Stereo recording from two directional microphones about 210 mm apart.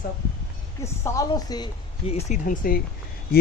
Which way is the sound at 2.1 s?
30° left (ahead or behind).